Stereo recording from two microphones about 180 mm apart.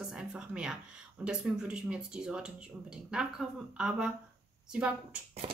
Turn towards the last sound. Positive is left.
turn(degrees=-5)  # may be behind; listen again after turning